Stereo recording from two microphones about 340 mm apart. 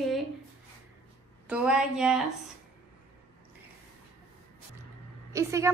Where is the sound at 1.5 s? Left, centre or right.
Centre.